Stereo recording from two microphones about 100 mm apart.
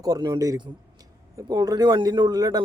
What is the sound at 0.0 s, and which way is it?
Speech, 45° right (ahead or behind).